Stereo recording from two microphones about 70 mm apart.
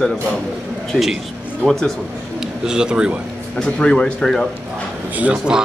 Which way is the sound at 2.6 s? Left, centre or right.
Centre.